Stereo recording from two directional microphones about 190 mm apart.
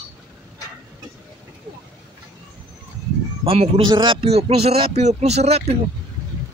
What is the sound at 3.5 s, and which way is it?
Speech, 30° right (ahead or behind).